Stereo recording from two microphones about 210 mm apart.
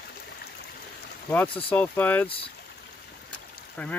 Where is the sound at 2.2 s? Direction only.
25° left (ahead or behind).